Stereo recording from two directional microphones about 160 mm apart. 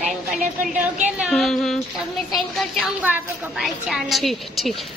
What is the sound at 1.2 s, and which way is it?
A woman's voice, centre (ahead or behind).